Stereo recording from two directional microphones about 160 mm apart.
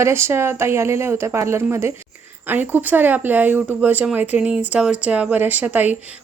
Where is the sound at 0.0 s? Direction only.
15° right (ahead or behind).